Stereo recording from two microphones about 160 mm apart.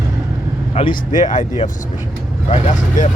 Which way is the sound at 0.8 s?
35° left (ahead or behind).